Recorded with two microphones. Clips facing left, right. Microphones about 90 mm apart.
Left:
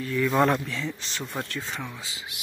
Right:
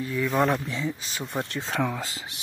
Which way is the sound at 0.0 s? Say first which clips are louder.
Left 1 dB; 10° right (ahead or behind).